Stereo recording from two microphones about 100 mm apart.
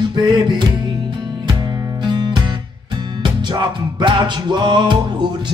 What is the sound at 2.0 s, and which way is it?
Music, 50° right (ahead or behind).